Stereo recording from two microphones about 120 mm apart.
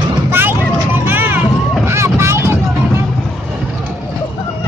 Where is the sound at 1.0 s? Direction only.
20° right (ahead or behind).